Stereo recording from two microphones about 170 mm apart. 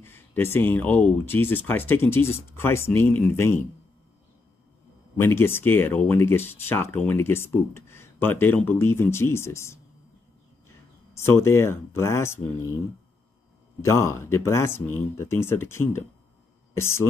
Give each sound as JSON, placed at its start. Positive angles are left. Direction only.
{"t": 0.0, "sound": "speech", "side_deg": 15}
{"t": 5.1, "sound": "speech", "side_deg": 15}
{"t": 11.1, "sound": "speech", "side_deg": 15}
{"t": 13.7, "sound": "a woman's voice", "side_deg": 15}